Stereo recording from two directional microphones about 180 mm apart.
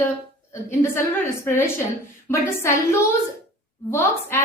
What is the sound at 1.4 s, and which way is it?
A woman's voice, 15° left (ahead or behind).